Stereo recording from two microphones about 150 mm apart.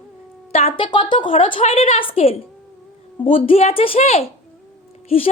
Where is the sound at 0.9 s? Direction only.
30° left (ahead or behind).